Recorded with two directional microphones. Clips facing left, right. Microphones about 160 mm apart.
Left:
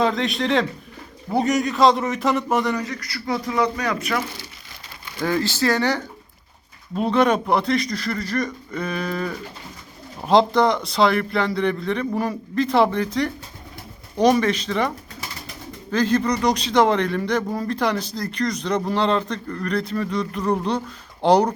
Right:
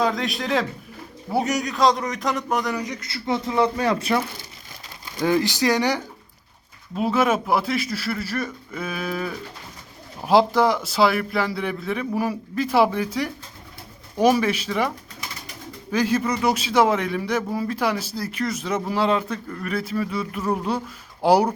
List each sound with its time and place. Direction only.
0.0 s speech: centre (ahead or behind)
2.8 s speech: 20° right (ahead or behind)
5.2 s a man's voice: 15° right (ahead or behind)